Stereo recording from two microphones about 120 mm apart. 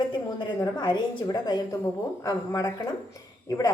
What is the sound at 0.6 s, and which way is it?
A woman's voice, 40° left (ahead or behind).